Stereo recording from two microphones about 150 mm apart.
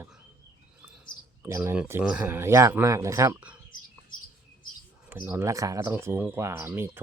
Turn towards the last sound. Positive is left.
turn(degrees=-15)  # may be behind; listen again after turning